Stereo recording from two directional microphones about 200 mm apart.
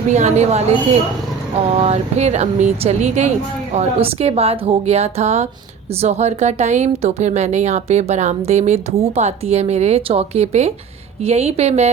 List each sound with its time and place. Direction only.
0.1 s speech: 35° right (ahead or behind)
1.7 s speech: 30° right (ahead or behind)